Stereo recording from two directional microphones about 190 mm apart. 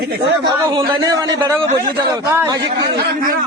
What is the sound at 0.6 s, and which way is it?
A man's voice, 20° right (ahead or behind).